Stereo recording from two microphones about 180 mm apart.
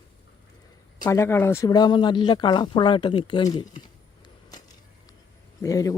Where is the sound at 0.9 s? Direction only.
20° left (ahead or behind).